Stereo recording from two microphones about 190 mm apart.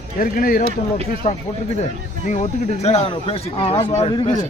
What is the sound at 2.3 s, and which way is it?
Speech, 35° left (ahead or behind).